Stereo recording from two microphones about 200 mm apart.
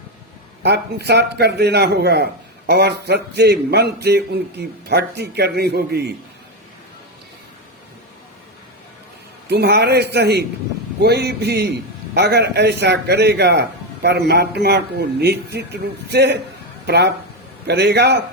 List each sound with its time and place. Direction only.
0.6 s a man's voice: 55° right (ahead or behind)
9.5 s a man's voice: 55° right (ahead or behind)